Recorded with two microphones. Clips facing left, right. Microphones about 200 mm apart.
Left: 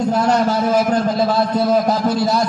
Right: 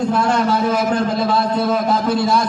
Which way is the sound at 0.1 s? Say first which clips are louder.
Left 3 dB; 40° left (ahead or behind).